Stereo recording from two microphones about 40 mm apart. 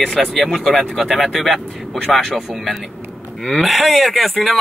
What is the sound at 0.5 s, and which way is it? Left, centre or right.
Speech, centre.